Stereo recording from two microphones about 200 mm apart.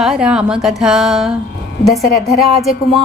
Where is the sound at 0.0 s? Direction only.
5° right (ahead or behind).